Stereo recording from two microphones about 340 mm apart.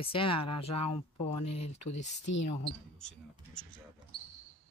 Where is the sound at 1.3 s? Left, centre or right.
Left.